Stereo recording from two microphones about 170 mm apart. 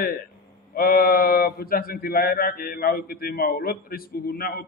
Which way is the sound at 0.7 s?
60° left (ahead or behind).